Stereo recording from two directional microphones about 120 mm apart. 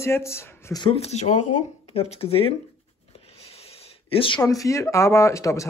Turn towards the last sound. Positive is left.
turn(degrees=25)  # may be behind; listen again after turning